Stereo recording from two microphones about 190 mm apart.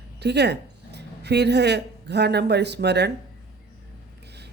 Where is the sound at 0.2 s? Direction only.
60° right (ahead or behind).